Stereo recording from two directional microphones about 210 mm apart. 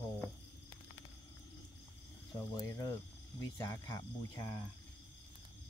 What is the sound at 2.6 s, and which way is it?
Speech, 15° left (ahead or behind).